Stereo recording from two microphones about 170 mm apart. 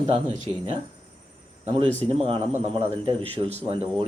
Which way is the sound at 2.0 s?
35° right (ahead or behind).